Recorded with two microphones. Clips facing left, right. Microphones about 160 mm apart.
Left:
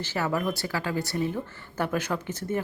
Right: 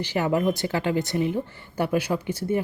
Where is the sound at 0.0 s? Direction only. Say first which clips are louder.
Right 5 dB; 15° right (ahead or behind).